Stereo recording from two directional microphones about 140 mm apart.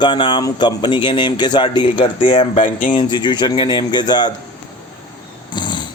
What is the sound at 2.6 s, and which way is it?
Speech, 70° left (ahead or behind).